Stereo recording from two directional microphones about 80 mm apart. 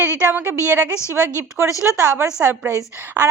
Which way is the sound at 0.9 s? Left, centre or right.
Left.